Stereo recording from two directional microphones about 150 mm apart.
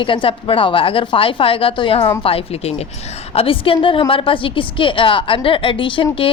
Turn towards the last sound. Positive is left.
turn(degrees=35)  # may be behind; listen again after turning